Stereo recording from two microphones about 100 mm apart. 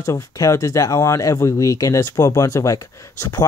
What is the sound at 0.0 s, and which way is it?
Speech, 35° left (ahead or behind).